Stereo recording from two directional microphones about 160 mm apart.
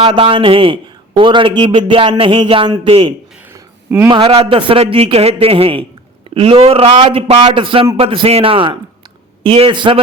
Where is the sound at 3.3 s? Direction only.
10° right (ahead or behind).